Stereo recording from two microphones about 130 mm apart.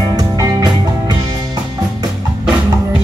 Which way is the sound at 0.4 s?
25° right (ahead or behind).